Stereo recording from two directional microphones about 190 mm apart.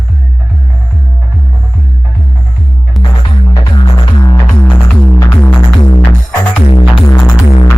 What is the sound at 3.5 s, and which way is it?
Music, 25° left (ahead or behind).